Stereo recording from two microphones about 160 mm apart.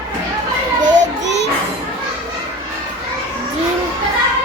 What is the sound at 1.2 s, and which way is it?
Music, 90° right.